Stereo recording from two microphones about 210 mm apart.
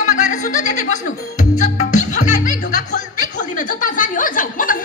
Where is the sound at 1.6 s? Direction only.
35° left (ahead or behind).